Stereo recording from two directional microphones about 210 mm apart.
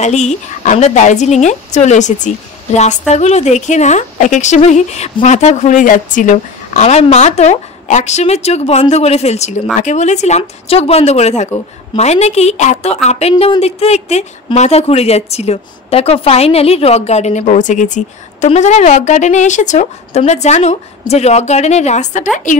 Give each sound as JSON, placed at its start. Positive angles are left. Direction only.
{"t": 0.0, "sound": "a woman's voice", "side_deg": 35}